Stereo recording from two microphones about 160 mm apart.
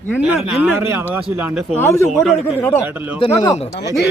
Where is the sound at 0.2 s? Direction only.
5° right (ahead or behind).